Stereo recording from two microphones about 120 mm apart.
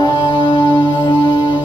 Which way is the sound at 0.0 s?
45° left (ahead or behind).